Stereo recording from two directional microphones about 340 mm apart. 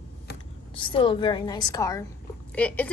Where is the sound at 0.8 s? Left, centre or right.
Centre.